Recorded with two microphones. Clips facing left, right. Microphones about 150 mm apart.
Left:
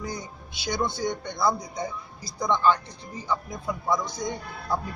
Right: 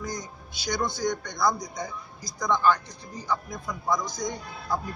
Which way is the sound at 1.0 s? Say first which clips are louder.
Right 1 dB; 25° left (ahead or behind).